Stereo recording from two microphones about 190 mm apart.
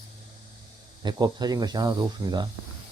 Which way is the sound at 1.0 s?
20° right (ahead or behind).